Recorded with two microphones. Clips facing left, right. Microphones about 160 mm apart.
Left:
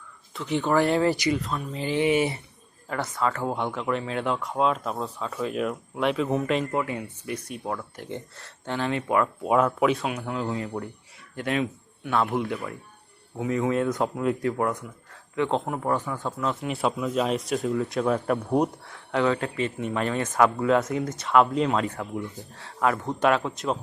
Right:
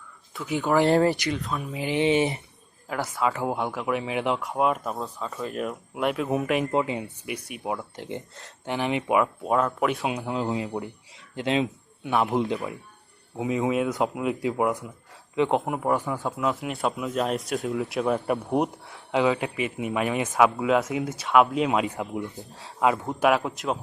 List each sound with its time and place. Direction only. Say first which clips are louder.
0.3 s speech: even; 5° right (ahead or behind)
0.9 s speech: right 2 dB; 35° right (ahead or behind)
1.1 s speech: left 3 dB; centre (ahead or behind)
1.8 s a man's voice: even; 20° right (ahead or behind)
2.9 s speech: right 1 dB; 5° right (ahead or behind)
6.7 s a man's voice: right 2 dB; 20° right (ahead or behind)
9.4 s speech: left 2 dB; 5° left (ahead or behind)
10.0 s a man's voice: right 2 dB; 20° right (ahead or behind); by 18.6 s centre (ahead or behind)
18.9 s speech: right 1 dB; 15° right (ahead or behind)
21.7 s speech: right 1 dB; 15° right (ahead or behind); by 23.8 s centre (ahead or behind)